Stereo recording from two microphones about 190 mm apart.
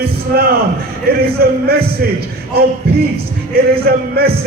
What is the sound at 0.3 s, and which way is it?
A man's voice, 55° right (ahead or behind).